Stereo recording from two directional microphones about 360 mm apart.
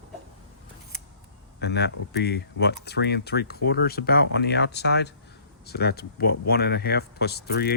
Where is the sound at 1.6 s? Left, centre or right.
Left.